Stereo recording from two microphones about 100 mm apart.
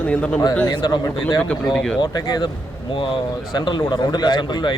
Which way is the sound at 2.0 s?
40° left (ahead or behind).